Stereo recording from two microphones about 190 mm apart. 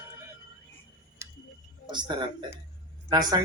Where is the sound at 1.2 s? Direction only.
15° right (ahead or behind).